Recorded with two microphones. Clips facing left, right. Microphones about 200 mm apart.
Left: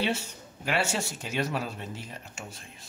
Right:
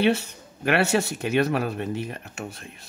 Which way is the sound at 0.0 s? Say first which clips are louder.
Right 8 dB; 60° right (ahead or behind).